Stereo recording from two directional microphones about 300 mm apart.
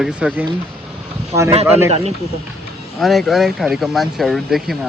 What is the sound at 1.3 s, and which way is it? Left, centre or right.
Speech, centre.